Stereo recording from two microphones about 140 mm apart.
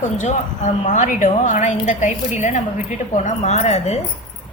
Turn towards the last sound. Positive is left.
turn(degrees=50)  # may be behind; listen again after turning